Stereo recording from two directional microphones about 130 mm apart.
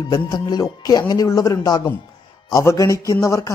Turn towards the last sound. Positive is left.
turn(degrees=25)  # may be behind; listen again after turning